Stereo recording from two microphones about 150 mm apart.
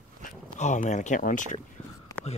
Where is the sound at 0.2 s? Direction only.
55° left (ahead or behind).